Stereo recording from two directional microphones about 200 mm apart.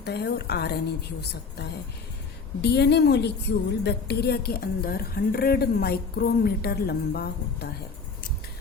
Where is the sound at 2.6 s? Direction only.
55° left (ahead or behind).